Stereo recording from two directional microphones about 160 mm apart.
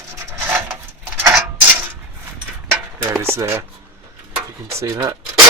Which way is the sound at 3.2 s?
15° right (ahead or behind).